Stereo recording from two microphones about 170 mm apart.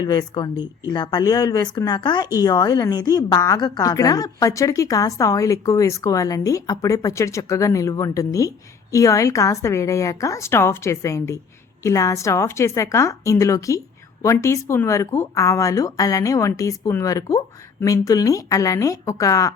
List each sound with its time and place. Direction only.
0.0 s speech: 25° left (ahead or behind)